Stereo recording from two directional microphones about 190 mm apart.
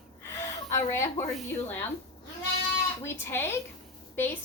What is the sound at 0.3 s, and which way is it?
Speech, 15° left (ahead or behind).